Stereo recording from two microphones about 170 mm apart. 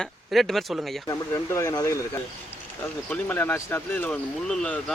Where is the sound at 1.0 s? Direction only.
15° left (ahead or behind).